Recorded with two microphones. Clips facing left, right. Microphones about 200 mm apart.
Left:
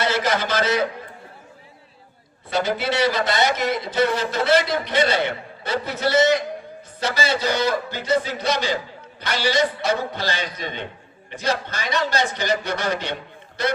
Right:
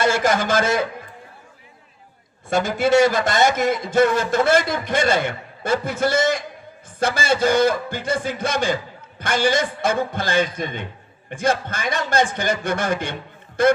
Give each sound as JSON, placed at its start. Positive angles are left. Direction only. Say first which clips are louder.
{"t": 0.0, "sound": "a man's voice", "louder": "right 3 dB", "side_deg": -50}
{"t": 2.5, "sound": "a man's voice", "louder": "right 5 dB", "side_deg": -50}